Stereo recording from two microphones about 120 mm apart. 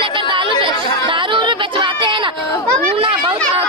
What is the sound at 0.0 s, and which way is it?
Chatter, 45° right (ahead or behind).